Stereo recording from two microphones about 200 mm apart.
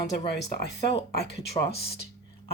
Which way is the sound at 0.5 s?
55° left (ahead or behind).